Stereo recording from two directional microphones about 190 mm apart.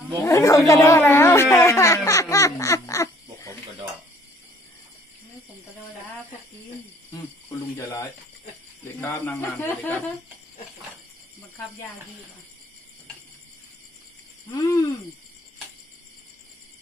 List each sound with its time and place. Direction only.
0.2 s a sound: 15° left (ahead or behind)
7.7 s speech: 15° left (ahead or behind)
14.5 s owl: 20° left (ahead or behind)